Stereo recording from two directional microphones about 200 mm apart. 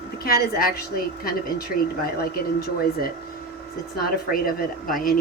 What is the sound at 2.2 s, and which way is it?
Speech, 50° left (ahead or behind).